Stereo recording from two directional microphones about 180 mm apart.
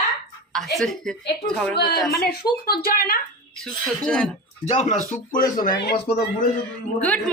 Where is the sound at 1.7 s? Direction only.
60° left (ahead or behind).